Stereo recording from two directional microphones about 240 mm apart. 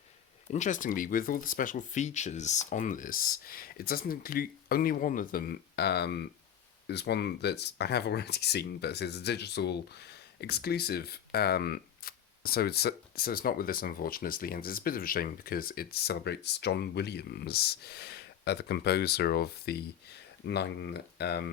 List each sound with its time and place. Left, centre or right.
0.5 s speech: left